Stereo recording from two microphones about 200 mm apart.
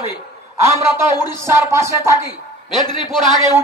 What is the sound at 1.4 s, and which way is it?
Speech, 15° right (ahead or behind).